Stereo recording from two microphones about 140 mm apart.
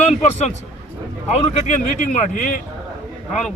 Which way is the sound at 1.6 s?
60° left (ahead or behind).